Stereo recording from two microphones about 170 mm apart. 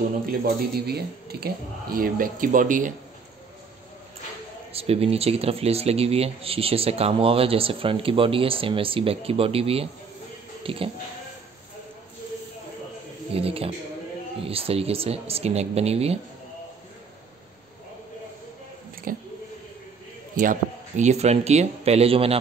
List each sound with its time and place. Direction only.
0.4 s speech: 65° right (ahead or behind); by 2.9 s 50° right (ahead or behind)
4.7 s speech: 35° right (ahead or behind)
13.3 s speech: 35° right (ahead or behind)
19.1 s speech: 55° right (ahead or behind)
20.3 s speech: 50° right (ahead or behind)